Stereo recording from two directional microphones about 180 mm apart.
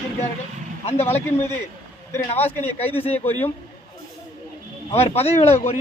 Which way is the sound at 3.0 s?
35° left (ahead or behind).